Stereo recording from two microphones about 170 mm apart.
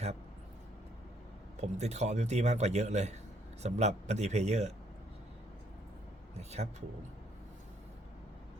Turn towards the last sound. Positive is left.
turn(degrees=-40)  # may be behind; listen again after turning